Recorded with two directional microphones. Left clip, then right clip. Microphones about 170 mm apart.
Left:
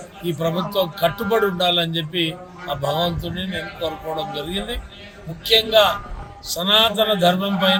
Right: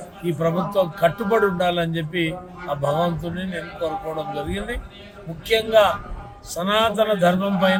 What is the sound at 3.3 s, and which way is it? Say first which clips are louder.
Speech: left 2 dB; centre (ahead or behind).